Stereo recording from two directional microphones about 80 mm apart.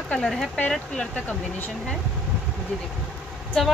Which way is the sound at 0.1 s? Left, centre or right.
Centre.